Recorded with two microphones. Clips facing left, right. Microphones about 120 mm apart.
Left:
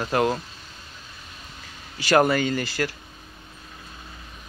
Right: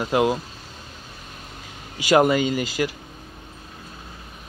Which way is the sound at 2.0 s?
15° right (ahead or behind).